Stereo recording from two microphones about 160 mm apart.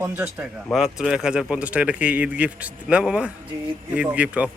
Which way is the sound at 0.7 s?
5° right (ahead or behind).